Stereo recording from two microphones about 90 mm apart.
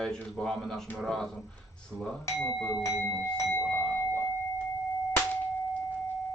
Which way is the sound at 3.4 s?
30° left (ahead or behind).